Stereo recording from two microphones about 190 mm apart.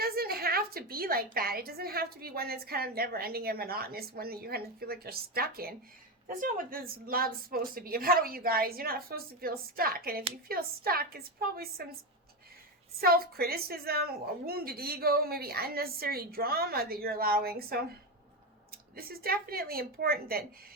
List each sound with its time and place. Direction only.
0.0 s a woman's voice: 55° right (ahead or behind)
13.0 s a woman's voice: 50° right (ahead or behind)
18.9 s a woman's voice: 50° right (ahead or behind)